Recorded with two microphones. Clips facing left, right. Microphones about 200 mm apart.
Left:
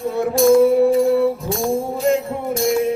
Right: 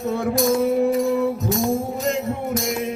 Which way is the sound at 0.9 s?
30° left (ahead or behind).